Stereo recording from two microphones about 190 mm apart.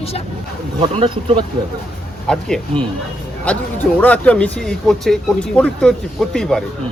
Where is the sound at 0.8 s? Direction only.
30° right (ahead or behind).